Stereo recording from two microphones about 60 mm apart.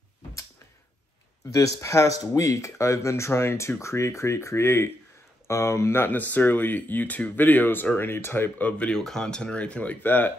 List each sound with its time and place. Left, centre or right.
1.5 s speech: left
6.0 s speech: left
8.5 s speech: left
8.9 s speech: centre; by 10.3 s left